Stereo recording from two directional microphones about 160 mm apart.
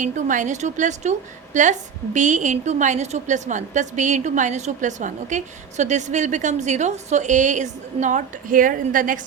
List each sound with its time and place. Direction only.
0.0 s a woman's voice: 50° right (ahead or behind)